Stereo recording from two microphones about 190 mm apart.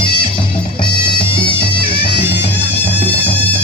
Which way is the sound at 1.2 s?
25° left (ahead or behind).